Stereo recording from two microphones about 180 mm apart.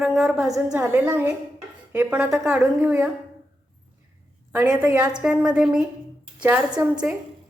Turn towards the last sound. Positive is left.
turn(degrees=-10)  # may be behind; listen again after turning